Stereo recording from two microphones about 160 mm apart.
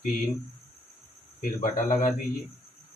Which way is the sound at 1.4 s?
60° left (ahead or behind).